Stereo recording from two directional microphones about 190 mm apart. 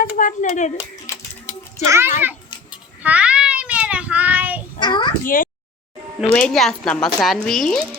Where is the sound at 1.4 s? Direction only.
15° right (ahead or behind).